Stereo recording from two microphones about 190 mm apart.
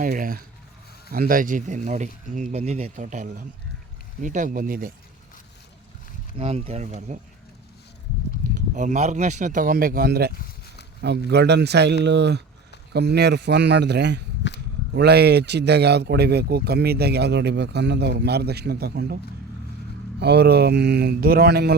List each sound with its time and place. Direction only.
0.0 s speech: 45° right (ahead or behind)
6.4 s speech: 35° right (ahead or behind)
8.7 s a man's voice: 40° right (ahead or behind); by 21.8 s 55° right (ahead or behind)